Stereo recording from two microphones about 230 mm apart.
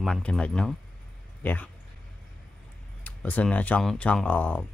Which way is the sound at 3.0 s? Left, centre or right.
Centre.